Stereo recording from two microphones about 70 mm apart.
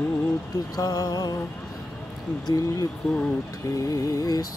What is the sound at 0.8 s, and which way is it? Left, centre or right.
Mantra, left.